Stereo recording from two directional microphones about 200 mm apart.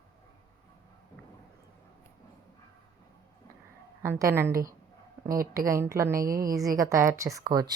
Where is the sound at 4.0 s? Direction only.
15° right (ahead or behind).